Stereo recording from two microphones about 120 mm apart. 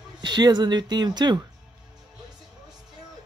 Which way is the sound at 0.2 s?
35° right (ahead or behind).